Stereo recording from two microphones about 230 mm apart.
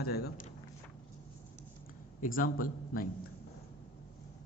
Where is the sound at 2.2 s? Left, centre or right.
Left.